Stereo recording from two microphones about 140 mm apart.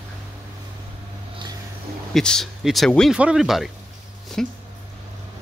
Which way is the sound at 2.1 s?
Centre (ahead or behind).